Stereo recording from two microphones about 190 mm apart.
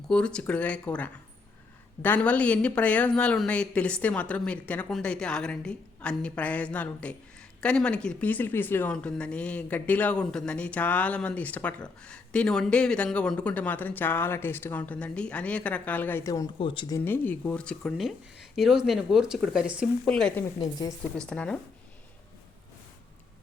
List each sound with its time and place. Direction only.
0.1 s speech: 5° left (ahead or behind); by 17.0 s 25° left (ahead or behind)
17.0 s speech: 10° left (ahead or behind)
20.6 s speech: 20° left (ahead or behind)
21.0 s speech: 5° left (ahead or behind)